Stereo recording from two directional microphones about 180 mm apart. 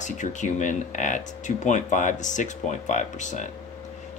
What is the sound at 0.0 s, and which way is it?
Speech, 45° left (ahead or behind).